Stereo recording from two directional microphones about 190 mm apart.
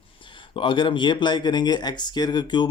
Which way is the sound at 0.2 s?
25° left (ahead or behind).